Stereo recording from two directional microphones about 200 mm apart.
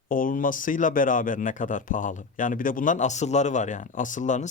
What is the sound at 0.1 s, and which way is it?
Speech, 45° left (ahead or behind).